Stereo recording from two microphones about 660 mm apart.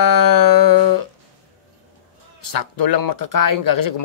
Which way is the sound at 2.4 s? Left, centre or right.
Left.